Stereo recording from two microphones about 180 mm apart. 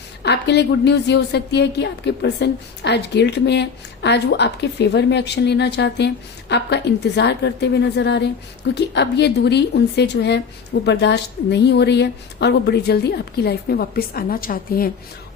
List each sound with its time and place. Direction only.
0.2 s a woman's voice: 70° left (ahead or behind); by 14.8 s 55° left (ahead or behind)